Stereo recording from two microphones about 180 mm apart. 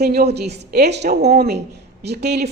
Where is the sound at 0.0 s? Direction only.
60° right (ahead or behind).